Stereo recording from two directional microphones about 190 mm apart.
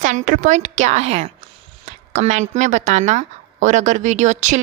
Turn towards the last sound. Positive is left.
turn(degrees=-40)  # may be behind; listen again after turning